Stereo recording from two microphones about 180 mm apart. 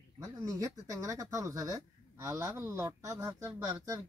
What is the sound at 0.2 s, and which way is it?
Speech, 20° right (ahead or behind).